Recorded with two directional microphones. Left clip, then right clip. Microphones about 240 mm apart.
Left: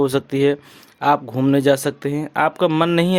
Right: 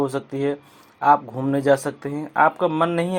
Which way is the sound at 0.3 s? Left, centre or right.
Left.